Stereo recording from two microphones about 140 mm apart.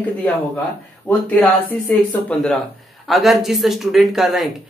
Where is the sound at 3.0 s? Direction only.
Centre (ahead or behind).